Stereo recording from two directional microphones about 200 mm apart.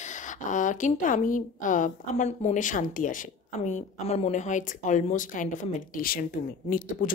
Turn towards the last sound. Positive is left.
turn(degrees=40)  # may be behind; listen again after turning